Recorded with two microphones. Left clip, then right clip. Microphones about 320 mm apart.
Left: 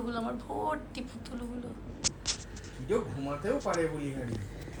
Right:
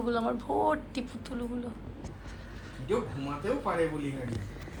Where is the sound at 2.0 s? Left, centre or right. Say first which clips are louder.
Left 12 dB; right.